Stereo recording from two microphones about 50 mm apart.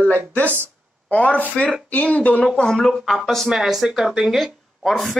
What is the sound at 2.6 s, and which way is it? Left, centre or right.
Speech, centre.